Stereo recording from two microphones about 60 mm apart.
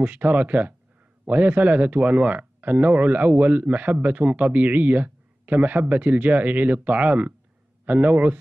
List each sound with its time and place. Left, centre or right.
0.0 s speech: right